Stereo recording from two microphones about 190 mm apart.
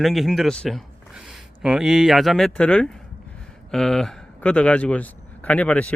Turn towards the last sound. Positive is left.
turn(degrees=5)  # may be behind; listen again after turning